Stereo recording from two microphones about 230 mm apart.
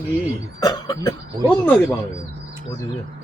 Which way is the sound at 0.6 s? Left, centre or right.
Centre.